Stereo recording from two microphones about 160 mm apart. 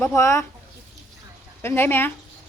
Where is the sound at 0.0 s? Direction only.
15° left (ahead or behind).